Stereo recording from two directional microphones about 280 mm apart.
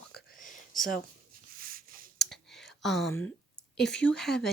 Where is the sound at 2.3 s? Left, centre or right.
Centre.